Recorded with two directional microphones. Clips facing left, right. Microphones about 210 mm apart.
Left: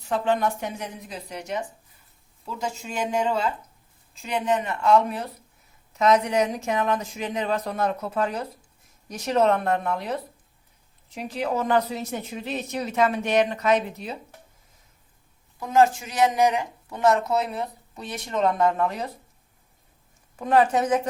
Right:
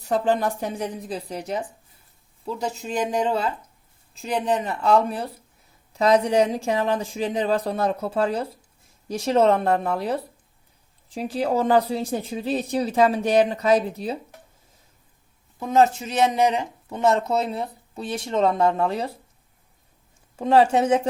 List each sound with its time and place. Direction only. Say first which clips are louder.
0.1 s speech: right 2 dB; 35° right (ahead or behind)
2.8 s speech: right 2 dB; 35° right (ahead or behind)
15.6 s speech: right 1 dB; 25° right (ahead or behind)
20.4 s speech: right 3 dB; 30° right (ahead or behind)